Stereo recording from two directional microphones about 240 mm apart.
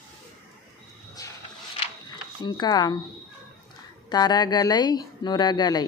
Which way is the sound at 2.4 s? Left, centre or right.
Centre.